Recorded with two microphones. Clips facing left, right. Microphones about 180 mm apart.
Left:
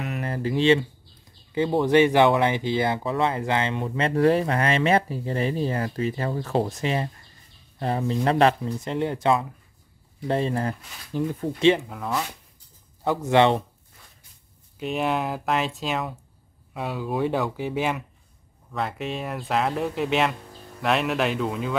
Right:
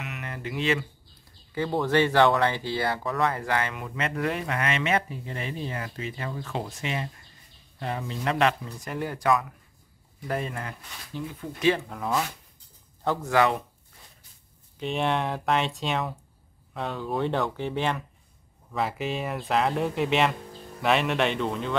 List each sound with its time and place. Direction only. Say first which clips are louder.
0.0 s a sound: left 8 dB; 35° left (ahead or behind)
1.5 s speech: left 5 dB; 20° left (ahead or behind); by 11.5 s 45° left (ahead or behind)
11.9 s speech: right 1 dB; centre (ahead or behind)
13.0 s a man's voice: left 4 dB; 20° left (ahead or behind)
14.8 s speech: left 1 dB; 5° left (ahead or behind)